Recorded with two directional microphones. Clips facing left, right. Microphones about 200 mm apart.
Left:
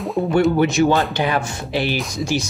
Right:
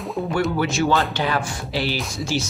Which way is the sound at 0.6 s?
20° left (ahead or behind).